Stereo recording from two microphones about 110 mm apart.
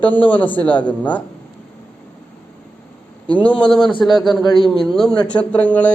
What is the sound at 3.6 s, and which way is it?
A man's voice, 5° left (ahead or behind).